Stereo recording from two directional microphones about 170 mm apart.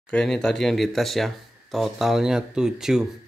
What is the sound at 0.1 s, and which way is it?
Speech, 5° left (ahead or behind).